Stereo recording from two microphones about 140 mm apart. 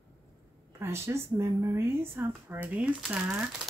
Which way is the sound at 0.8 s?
20° right (ahead or behind).